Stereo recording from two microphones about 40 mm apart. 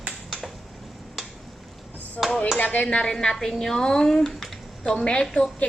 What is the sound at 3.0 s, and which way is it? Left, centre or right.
Speech, centre.